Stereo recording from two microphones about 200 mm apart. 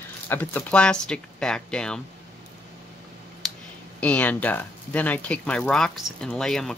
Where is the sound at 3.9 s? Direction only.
5° left (ahead or behind).